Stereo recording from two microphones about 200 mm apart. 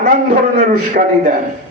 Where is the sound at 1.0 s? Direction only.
45° right (ahead or behind).